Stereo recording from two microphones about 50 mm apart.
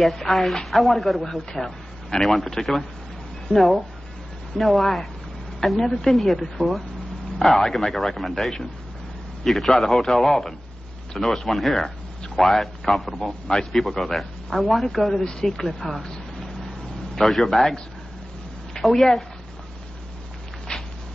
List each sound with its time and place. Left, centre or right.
0.0 s a man's voice: centre
17.1 s a man's voice: centre
20.7 s a sound: centre